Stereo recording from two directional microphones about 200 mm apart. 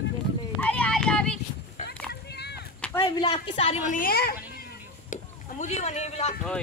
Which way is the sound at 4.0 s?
50° left (ahead or behind).